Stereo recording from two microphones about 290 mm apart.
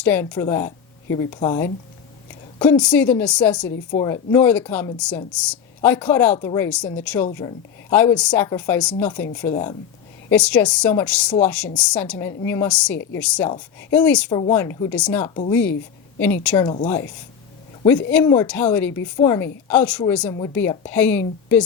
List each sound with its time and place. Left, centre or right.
0.0 s a woman's voice: centre
10.2 s a woman's voice: centre
14.3 s a woman's voice: centre
16.6 s a woman's voice: left
18.1 s a woman's voice: centre